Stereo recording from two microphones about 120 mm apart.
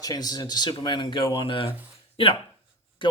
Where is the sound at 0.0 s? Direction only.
30° left (ahead or behind).